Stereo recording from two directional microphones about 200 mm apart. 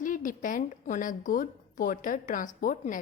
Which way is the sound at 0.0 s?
40° left (ahead or behind).